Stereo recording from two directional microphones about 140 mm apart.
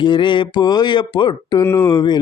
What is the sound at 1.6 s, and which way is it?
Speech, 20° left (ahead or behind).